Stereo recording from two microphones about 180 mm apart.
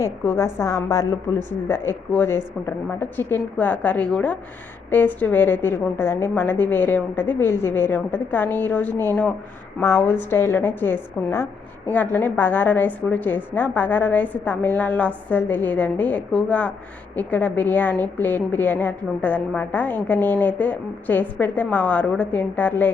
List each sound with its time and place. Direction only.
0.0 s a woman's voice: 15° left (ahead or behind)